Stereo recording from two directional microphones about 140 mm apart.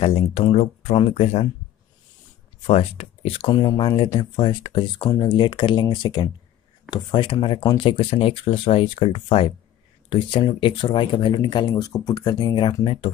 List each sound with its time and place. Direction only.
0.0 s speech: 45° left (ahead or behind)
2.6 s speech: 45° left (ahead or behind)